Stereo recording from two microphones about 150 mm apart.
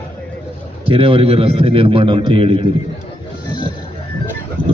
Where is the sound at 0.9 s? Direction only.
40° right (ahead or behind).